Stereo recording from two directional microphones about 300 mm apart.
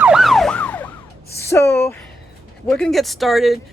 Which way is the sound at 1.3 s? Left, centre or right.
Centre.